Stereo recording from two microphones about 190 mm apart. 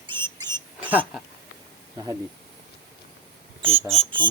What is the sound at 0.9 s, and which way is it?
Speech, 10° right (ahead or behind).